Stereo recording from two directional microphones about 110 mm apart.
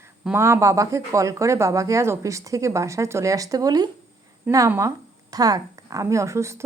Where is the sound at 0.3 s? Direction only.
25° right (ahead or behind).